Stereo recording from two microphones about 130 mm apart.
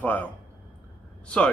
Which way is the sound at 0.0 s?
15° left (ahead or behind).